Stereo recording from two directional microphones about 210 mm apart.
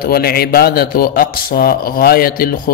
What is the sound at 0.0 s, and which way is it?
A man's voice, 45° left (ahead or behind).